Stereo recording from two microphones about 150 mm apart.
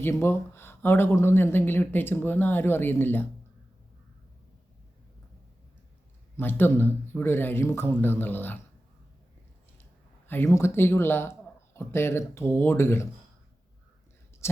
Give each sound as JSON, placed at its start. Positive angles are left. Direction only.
{"t": 0.0, "sound": "speech", "side_deg": 15}
{"t": 6.3, "sound": "speech", "side_deg": 15}
{"t": 10.2, "sound": "speech", "side_deg": 15}
{"t": 14.4, "sound": "speech", "side_deg": 15}